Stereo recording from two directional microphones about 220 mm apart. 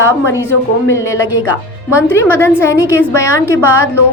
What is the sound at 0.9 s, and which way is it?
A woman's voice, 15° left (ahead or behind).